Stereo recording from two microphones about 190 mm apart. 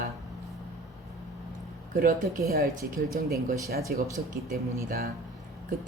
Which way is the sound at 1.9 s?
50° right (ahead or behind).